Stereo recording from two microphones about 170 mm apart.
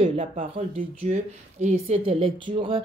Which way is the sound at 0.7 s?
45° right (ahead or behind).